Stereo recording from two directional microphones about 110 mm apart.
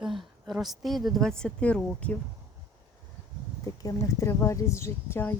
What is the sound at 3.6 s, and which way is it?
Speech, 30° left (ahead or behind).